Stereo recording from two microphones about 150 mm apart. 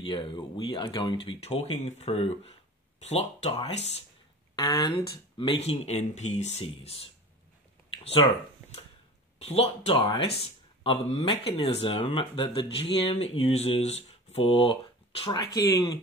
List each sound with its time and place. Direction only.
0.0 s speech: 30° left (ahead or behind)
4.6 s speech: 25° left (ahead or behind); by 7.0 s 40° left (ahead or behind)
7.9 s a sound: 40° left (ahead or behind)
9.4 s speech: 45° left (ahead or behind); by 16.0 s 25° left (ahead or behind)